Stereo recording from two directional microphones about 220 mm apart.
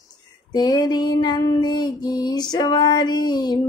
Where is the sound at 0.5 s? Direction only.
20° left (ahead or behind).